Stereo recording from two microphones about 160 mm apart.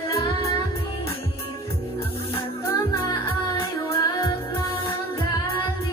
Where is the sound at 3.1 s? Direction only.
20° left (ahead or behind).